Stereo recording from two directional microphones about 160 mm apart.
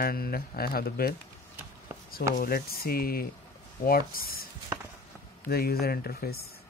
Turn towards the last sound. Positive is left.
turn(degrees=70)  # may be behind; listen again after turning